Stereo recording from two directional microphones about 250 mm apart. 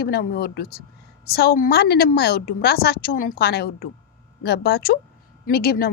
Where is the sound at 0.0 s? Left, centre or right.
Left.